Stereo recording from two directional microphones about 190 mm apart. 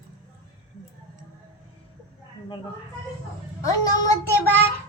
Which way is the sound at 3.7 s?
20° left (ahead or behind).